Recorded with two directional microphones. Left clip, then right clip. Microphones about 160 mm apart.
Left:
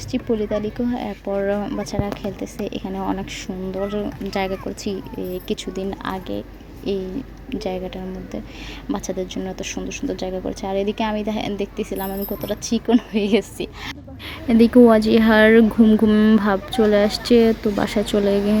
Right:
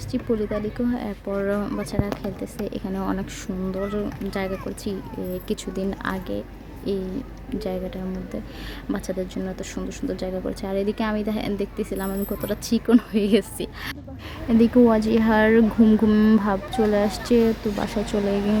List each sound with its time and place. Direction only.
0.1 s speech: 5° left (ahead or behind)
4.3 s a woman's voice: 15° left (ahead or behind)
7.5 s a woman's voice: 5° left (ahead or behind)
14.4 s speech: 20° left (ahead or behind)
15.8 s a woman's voice: 10° left (ahead or behind)
16.4 s speech: 20° left (ahead or behind)